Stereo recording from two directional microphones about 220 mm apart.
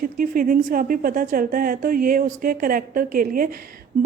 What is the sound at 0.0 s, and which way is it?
A woman's voice, 40° right (ahead or behind).